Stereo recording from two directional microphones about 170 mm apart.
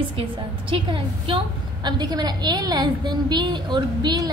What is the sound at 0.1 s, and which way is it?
A woman's voice, 30° right (ahead or behind).